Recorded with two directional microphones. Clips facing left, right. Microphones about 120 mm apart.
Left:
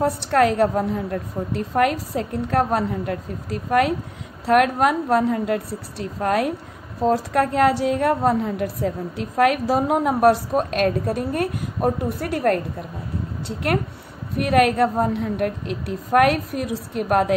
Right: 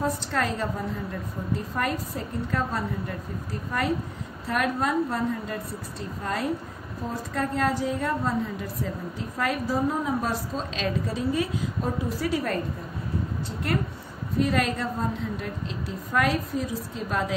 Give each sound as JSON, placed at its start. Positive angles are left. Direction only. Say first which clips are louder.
{"t": 0.0, "sound": "a woman's voice", "louder": "left 9 dB", "side_deg": 65}